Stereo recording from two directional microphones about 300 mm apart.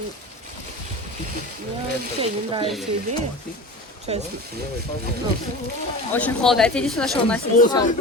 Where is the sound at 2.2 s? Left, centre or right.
Centre.